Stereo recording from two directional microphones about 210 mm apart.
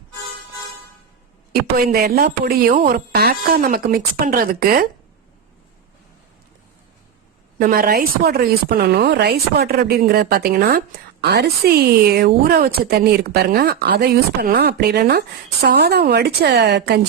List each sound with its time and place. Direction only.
1.7 s speech: 45° right (ahead or behind)
7.6 s speech: 45° right (ahead or behind)